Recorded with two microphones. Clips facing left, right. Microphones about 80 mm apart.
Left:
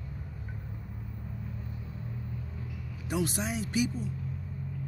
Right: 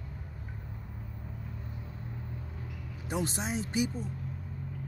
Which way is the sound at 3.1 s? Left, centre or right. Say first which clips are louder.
Left 2 dB; right.